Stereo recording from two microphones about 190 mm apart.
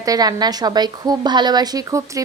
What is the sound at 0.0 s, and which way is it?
A woman's voice, 20° right (ahead or behind).